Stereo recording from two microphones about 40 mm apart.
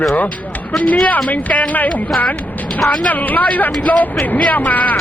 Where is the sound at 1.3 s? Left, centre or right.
Left.